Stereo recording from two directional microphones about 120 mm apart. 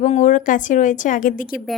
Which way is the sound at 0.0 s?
90° left.